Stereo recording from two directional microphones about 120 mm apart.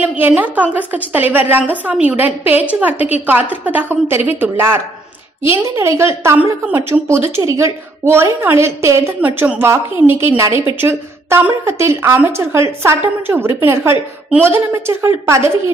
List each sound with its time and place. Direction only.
0.0 s a woman's voice: 10° right (ahead or behind)